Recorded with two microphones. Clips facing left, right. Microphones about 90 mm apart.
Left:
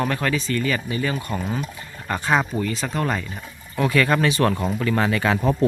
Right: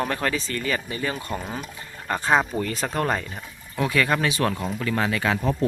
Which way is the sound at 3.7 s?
10° right (ahead or behind).